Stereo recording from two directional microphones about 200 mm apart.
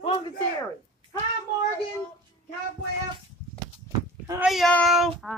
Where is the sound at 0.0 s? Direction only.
25° left (ahead or behind).